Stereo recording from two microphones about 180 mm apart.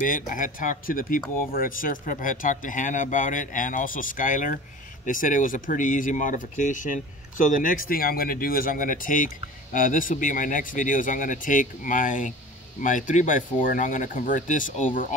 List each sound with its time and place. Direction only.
0.0 s speech: 45° left (ahead or behind)